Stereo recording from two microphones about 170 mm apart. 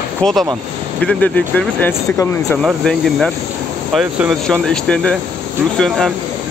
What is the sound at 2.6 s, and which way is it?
Speech, centre (ahead or behind).